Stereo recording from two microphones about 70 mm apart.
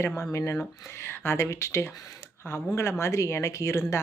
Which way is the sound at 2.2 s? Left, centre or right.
Left.